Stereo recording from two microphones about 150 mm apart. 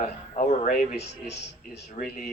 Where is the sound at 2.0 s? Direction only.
50° left (ahead or behind).